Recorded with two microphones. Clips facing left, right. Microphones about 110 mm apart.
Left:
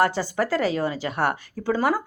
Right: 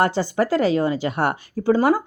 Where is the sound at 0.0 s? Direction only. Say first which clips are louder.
Right 2 dB; 25° right (ahead or behind).